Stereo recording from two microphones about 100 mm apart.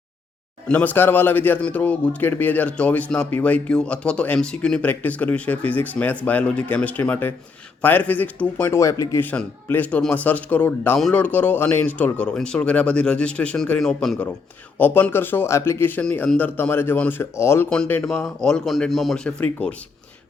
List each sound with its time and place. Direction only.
0.7 s speech: 15° left (ahead or behind)
8.7 s speech: 30° left (ahead or behind)
9.2 s speech: 15° left (ahead or behind)
14.8 s speech: 20° left (ahead or behind)
18.0 s speech: 5° left (ahead or behind)